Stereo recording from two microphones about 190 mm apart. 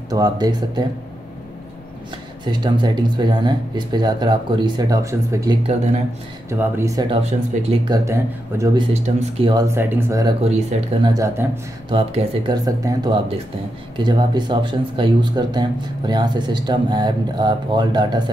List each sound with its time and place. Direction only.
0.1 s speech: 20° right (ahead or behind)
2.4 s speech: 25° right (ahead or behind)
6.6 s speech: 15° right (ahead or behind)
7.1 s speech: 35° right (ahead or behind)
7.9 s speech: 15° right (ahead or behind)
8.9 s speech: 30° right (ahead or behind); by 10.3 s 15° right (ahead or behind)
10.4 s speech: 35° right (ahead or behind)
11.1 s speech: 15° right (ahead or behind)
11.9 s speech: 30° right (ahead or behind)